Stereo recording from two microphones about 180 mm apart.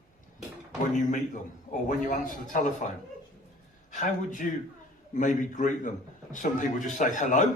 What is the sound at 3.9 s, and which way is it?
A man's voice, 45° left (ahead or behind).